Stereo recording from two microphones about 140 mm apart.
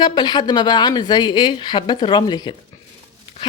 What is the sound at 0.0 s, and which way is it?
A woman's voice, 30° left (ahead or behind).